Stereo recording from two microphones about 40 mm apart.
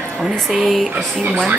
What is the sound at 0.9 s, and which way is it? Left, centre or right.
Speech, right.